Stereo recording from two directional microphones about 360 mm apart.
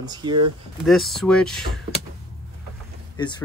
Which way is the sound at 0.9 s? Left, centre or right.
Centre.